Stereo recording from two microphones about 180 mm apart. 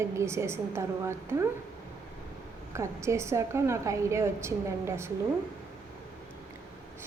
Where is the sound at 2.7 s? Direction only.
15° right (ahead or behind).